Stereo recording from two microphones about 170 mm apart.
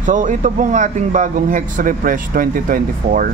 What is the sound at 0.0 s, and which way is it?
Speech, 50° right (ahead or behind).